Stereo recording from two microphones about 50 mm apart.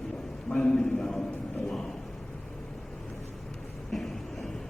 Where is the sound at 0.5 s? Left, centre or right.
Centre.